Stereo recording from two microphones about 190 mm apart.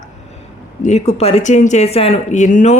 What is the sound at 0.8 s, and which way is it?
Speech, 35° left (ahead or behind).